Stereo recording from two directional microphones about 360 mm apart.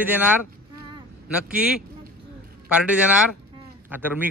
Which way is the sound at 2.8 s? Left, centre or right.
Centre.